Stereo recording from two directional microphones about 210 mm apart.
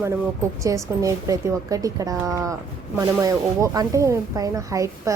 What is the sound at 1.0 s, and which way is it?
A woman's voice, 15° right (ahead or behind).